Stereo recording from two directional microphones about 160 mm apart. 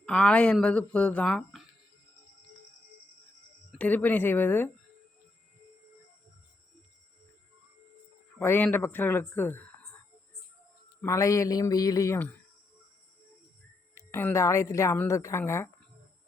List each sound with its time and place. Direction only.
0.0 s a woman's voice: 5° left (ahead or behind)
3.7 s a woman's voice: 10° left (ahead or behind)
8.4 s a woman's voice: 10° left (ahead or behind)
11.0 s speech: 20° left (ahead or behind)
13.9 s a woman's voice: 15° left (ahead or behind)